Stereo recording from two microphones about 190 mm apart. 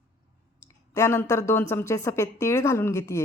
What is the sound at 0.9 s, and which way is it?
A woman's voice, 15° left (ahead or behind).